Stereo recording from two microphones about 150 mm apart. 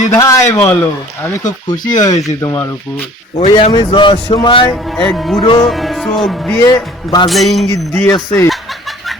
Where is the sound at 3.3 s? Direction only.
40° left (ahead or behind).